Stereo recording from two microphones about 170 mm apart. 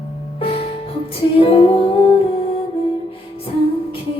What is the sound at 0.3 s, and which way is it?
Music, 35° left (ahead or behind).